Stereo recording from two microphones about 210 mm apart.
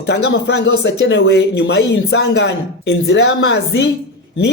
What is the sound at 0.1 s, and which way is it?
Speech, 55° left (ahead or behind).